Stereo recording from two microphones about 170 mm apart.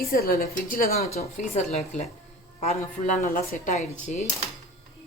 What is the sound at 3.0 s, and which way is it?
Speech, 50° left (ahead or behind).